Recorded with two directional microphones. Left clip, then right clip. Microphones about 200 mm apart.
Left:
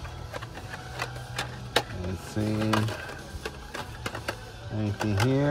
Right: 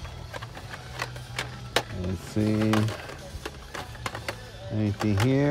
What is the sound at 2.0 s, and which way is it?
Speech, 10° right (ahead or behind).